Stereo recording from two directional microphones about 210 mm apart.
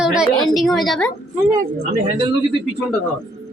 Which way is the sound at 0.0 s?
5° right (ahead or behind).